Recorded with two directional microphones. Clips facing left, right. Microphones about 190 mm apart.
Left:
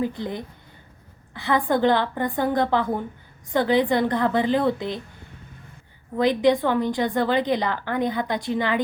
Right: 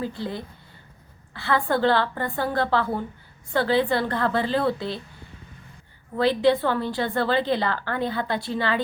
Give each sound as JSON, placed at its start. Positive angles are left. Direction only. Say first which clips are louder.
{"t": 0.0, "sound": "a woman's voice", "louder": "left 3 dB", "side_deg": 20}
{"t": 6.1, "sound": "a woman's voice", "louder": "left 1 dB", "side_deg": 15}